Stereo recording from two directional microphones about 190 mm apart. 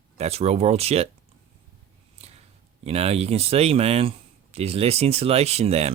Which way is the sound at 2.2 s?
30° right (ahead or behind).